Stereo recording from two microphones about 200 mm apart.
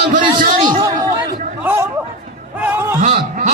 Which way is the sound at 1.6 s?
10° right (ahead or behind).